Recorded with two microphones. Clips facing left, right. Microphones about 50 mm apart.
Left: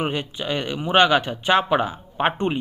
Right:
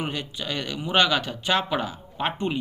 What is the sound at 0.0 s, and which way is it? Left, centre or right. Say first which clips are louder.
Speech: left 5 dB; left.